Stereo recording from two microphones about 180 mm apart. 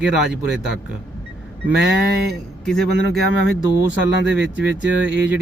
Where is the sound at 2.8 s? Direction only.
70° right (ahead or behind).